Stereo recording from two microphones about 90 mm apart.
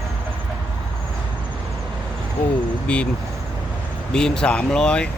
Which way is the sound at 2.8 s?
10° left (ahead or behind).